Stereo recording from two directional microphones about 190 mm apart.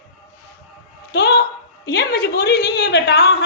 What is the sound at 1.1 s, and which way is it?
A woman's voice, 60° left (ahead or behind).